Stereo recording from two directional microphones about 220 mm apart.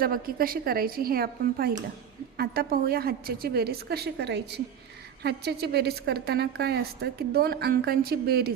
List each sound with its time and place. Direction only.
0.0 s a woman's voice: 40° right (ahead or behind)